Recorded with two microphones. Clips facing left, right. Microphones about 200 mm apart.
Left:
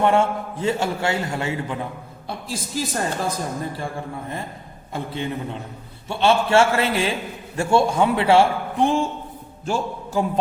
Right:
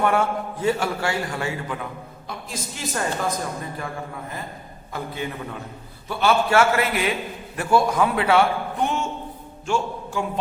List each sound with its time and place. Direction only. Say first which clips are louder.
0.0 s a man's voice: left 3 dB; 25° left (ahead or behind)
4.9 s a man's voice: left 3 dB; 25° left (ahead or behind)